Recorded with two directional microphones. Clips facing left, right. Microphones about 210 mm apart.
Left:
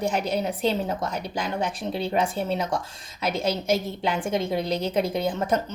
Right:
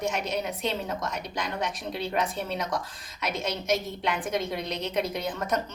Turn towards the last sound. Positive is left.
turn(degrees=30)  # may be behind; listen again after turning